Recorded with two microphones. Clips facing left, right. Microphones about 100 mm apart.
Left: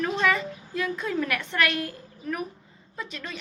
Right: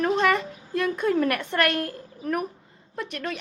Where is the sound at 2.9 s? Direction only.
60° right (ahead or behind).